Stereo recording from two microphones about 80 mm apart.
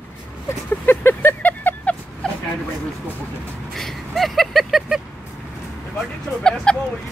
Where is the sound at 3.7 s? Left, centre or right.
Centre.